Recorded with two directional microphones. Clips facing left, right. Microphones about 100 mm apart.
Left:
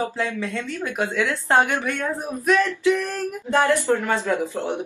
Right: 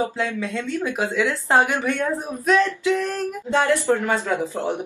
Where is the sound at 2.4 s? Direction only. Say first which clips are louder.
Even; 20° right (ahead or behind).